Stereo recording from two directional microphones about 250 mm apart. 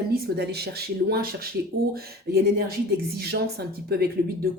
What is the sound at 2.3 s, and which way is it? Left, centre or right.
Speech, right.